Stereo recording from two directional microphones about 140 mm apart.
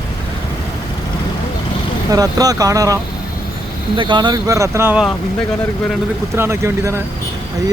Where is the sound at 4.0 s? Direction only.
35° right (ahead or behind).